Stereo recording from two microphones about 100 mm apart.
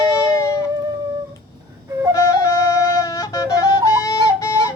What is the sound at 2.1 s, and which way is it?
Flute, 30° left (ahead or behind).